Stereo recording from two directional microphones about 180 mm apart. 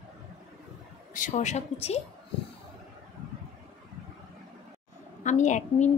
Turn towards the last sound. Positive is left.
turn(degrees=40)  # may be behind; listen again after turning